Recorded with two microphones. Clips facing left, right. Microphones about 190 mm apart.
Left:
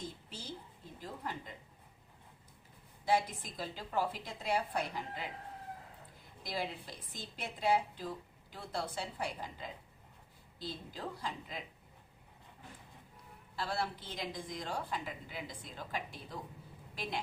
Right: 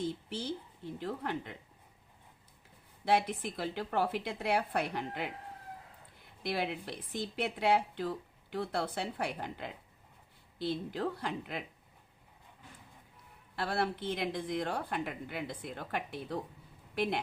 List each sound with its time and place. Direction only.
0.0 s a woman's voice: 65° right (ahead or behind)
3.0 s speech: 65° right (ahead or behind)
6.4 s speech: 65° right (ahead or behind)
13.6 s speech: 60° right (ahead or behind)